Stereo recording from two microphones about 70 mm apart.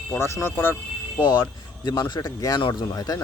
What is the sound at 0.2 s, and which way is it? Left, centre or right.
Speech, left.